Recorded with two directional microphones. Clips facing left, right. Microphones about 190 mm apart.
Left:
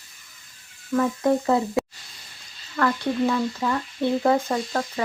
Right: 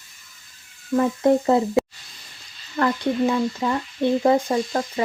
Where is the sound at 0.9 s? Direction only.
25° right (ahead or behind).